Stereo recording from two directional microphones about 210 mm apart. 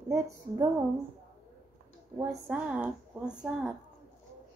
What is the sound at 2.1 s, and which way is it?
Speech, 10° right (ahead or behind).